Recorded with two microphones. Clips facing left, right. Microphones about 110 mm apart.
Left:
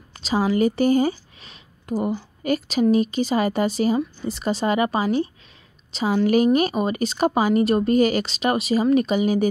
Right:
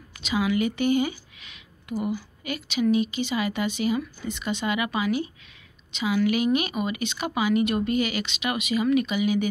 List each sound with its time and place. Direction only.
0.2 s speech: 35° left (ahead or behind)